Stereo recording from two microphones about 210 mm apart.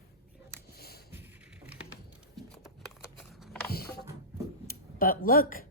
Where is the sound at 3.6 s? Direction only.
45° left (ahead or behind).